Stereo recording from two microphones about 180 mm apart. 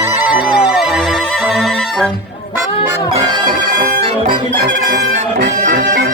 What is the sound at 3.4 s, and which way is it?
Music, 50° right (ahead or behind).